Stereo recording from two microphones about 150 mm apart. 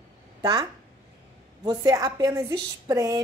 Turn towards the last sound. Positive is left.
turn(degrees=-25)  # may be behind; listen again after turning